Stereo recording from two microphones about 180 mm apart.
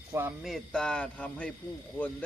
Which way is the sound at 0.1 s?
15° right (ahead or behind).